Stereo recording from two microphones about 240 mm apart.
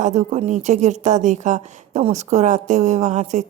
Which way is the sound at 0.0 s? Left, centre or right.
Right.